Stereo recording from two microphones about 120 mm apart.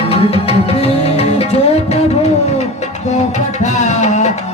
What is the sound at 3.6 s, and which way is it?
Music, 75° left (ahead or behind).